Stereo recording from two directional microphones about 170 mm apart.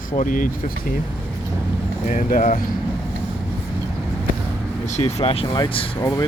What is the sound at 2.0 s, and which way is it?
Speech, 50° left (ahead or behind).